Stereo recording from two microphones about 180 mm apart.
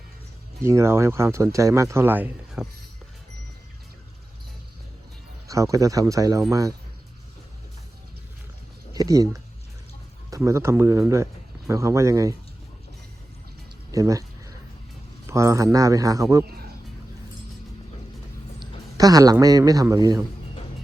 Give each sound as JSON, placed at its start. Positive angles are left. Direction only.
{"t": 0.6, "sound": "speech", "side_deg": -15}
{"t": 5.5, "sound": "speech", "side_deg": -20}
{"t": 8.9, "sound": "speech", "side_deg": -20}
{"t": 13.9, "sound": "a sound", "side_deg": -20}
{"t": 15.3, "sound": "speech", "side_deg": -15}
{"t": 18.6, "sound": "a man's voice", "side_deg": -20}